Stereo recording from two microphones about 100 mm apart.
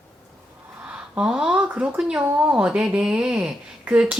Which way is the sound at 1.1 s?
10° right (ahead or behind).